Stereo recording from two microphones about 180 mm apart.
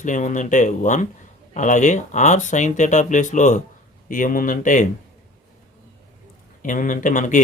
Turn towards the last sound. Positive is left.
turn(degrees=45)  # may be behind; listen again after turning